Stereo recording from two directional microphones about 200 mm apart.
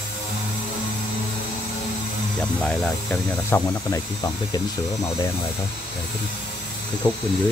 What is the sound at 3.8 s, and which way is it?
Speech, 15° left (ahead or behind).